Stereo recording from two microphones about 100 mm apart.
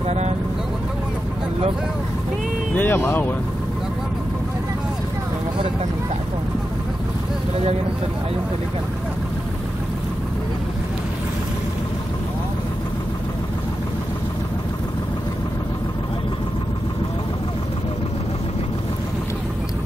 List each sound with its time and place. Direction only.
2.7 s speech: 20° left (ahead or behind)